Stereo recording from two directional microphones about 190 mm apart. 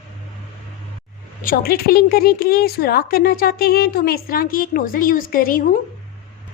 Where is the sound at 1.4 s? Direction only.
50° left (ahead or behind).